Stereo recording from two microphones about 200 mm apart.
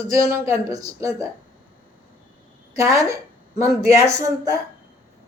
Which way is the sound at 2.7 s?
15° right (ahead or behind).